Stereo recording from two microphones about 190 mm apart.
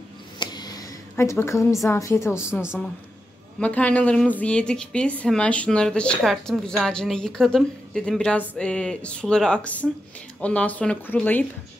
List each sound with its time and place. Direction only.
0.4 s a sound: 20° left (ahead or behind)
1.9 s speech: 15° left (ahead or behind)
2.6 s a woman's voice: 5° right (ahead or behind)
3.5 s a woman's voice: 5° left (ahead or behind)